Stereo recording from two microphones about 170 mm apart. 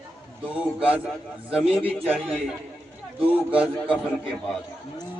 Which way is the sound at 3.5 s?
5° right (ahead or behind).